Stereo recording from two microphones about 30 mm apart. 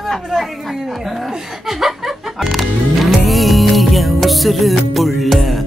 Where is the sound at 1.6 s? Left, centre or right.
Centre.